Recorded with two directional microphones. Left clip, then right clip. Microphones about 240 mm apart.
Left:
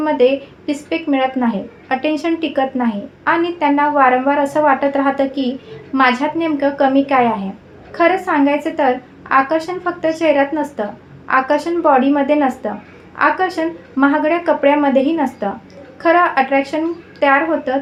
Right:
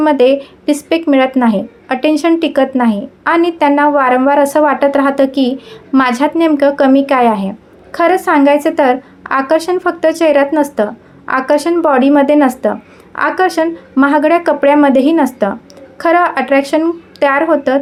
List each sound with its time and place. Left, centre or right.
0.0 s speech: right